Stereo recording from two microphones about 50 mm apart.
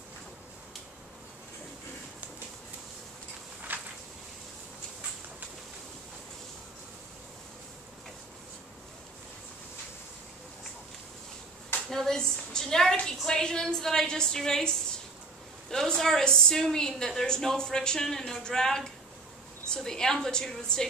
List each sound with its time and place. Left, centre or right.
3.7 s a sound: right
11.9 s a woman's voice: centre
15.7 s a woman's voice: centre